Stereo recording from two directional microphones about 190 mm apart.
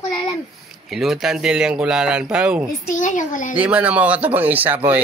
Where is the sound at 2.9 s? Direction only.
40° left (ahead or behind).